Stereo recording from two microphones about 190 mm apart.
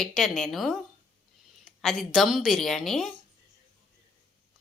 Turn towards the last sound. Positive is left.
turn(degrees=0)  # may be behind; listen again after turning